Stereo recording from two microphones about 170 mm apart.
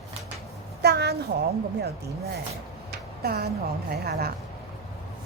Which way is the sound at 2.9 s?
65° right (ahead or behind).